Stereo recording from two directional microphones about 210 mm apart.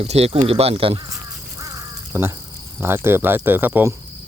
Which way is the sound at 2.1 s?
10° right (ahead or behind).